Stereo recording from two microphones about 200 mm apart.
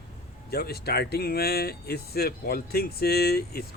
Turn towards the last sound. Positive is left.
turn(degrees=50)  # may be behind; listen again after turning